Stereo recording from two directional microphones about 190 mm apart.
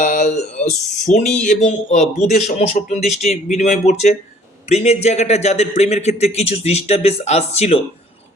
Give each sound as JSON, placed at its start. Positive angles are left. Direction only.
{"t": 0.0, "sound": "speech", "side_deg": 40}